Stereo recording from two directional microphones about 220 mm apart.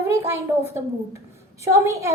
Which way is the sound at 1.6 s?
15° right (ahead or behind).